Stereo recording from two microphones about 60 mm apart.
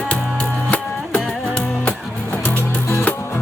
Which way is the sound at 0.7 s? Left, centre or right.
Left.